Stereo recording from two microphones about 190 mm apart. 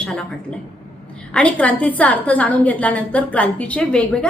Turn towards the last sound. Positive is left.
turn(degrees=5)  # may be behind; listen again after turning